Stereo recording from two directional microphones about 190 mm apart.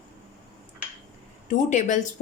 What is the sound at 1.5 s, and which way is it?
Speech, 40° left (ahead or behind).